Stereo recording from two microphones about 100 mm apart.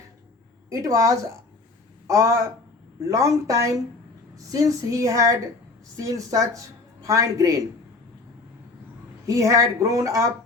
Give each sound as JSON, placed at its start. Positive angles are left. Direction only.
{"t": 0.7, "sound": "speech", "side_deg": -35}
{"t": 9.2, "sound": "speech", "side_deg": -35}